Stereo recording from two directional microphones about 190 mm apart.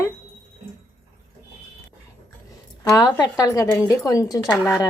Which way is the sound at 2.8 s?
20° left (ahead or behind).